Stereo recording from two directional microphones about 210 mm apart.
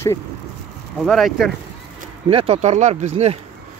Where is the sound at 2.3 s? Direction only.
25° right (ahead or behind).